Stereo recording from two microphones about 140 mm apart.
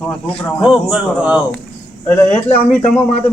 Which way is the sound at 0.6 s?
5° right (ahead or behind).